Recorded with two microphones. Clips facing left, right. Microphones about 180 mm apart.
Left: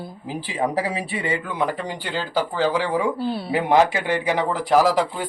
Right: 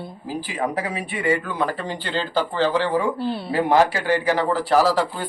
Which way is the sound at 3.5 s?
20° left (ahead or behind).